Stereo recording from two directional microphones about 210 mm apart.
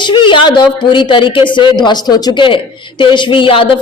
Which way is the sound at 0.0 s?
25° left (ahead or behind).